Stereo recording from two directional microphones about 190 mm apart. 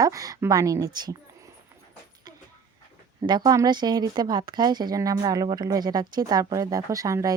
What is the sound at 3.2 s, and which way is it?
Speech, 20° right (ahead or behind).